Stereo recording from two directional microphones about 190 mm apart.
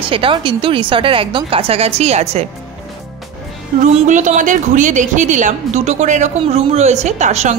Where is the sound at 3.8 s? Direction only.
40° right (ahead or behind).